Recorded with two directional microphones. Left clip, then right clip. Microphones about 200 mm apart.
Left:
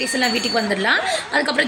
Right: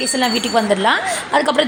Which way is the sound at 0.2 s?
15° right (ahead or behind).